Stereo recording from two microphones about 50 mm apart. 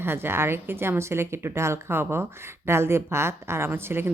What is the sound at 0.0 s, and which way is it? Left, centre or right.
A woman's voice, right.